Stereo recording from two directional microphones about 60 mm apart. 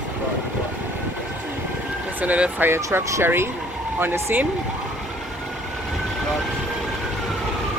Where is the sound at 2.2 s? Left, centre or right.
Right.